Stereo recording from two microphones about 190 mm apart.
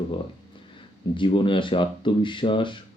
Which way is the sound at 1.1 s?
25° left (ahead or behind).